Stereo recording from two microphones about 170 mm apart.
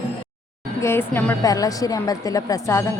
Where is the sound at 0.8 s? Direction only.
15° left (ahead or behind).